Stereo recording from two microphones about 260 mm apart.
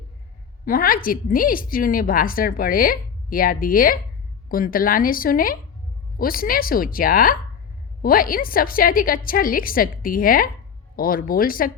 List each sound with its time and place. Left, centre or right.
0.6 s a woman's voice: left